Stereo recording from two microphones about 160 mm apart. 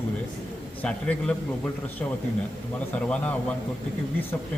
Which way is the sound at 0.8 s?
5° left (ahead or behind).